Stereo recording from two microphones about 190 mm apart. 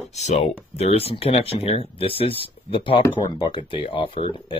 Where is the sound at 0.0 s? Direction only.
35° left (ahead or behind).